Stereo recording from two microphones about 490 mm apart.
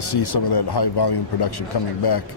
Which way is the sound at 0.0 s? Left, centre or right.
Left.